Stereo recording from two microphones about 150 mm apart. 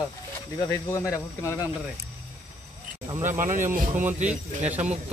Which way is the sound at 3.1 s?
15° right (ahead or behind).